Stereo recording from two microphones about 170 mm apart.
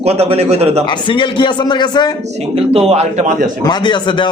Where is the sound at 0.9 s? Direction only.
30° left (ahead or behind).